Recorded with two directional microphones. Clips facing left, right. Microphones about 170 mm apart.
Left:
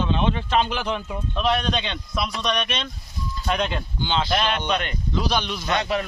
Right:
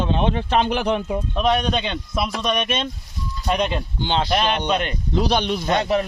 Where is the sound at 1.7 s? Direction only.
45° right (ahead or behind).